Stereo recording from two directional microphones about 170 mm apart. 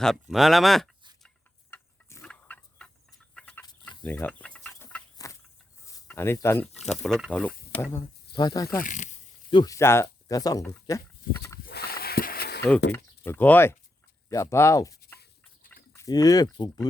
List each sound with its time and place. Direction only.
0.0 s speech: centre (ahead or behind)
1.7 s a sound: 15° left (ahead or behind)
6.1 s speech: 15° left (ahead or behind)
6.9 s speech: 5° left (ahead or behind)
8.3 s speech: 25° left (ahead or behind)
8.8 s speech: 45° left (ahead or behind)
9.5 s speech: 30° left (ahead or behind)
9.7 s speech: 15° left (ahead or behind)
11.6 s a sound: 65° left (ahead or behind)
13.2 s speech: 10° left (ahead or behind)
15.7 s livestock: 10° left (ahead or behind)
16.0 s speech: 20° left (ahead or behind)